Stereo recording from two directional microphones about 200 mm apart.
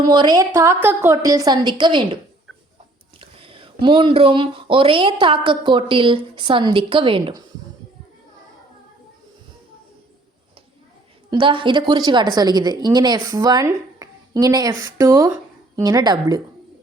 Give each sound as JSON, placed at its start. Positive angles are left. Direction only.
{"t": 0.0, "sound": "speech", "side_deg": -20}
{"t": 3.2, "sound": "speech", "side_deg": -25}
{"t": 11.3, "sound": "speech", "side_deg": -25}